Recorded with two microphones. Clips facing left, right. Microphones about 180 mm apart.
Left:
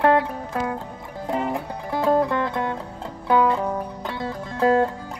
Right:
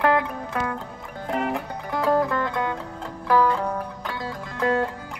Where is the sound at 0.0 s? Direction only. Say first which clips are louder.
Left 3 dB; 25° left (ahead or behind).